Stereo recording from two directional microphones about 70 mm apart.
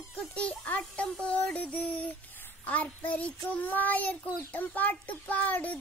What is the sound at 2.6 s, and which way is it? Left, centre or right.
A child's voice, left.